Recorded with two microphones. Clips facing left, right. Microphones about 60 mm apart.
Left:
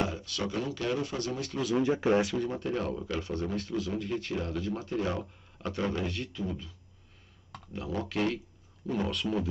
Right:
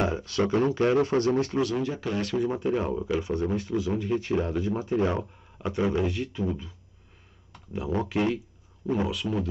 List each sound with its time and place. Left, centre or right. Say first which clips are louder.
0.0 s speech: right 6 dB; right
1.8 s speech: left 4 dB; left
2.3 s speech: right 5 dB; centre
7.7 s speech: right 5 dB; right
9.0 s speech: right 2 dB; centre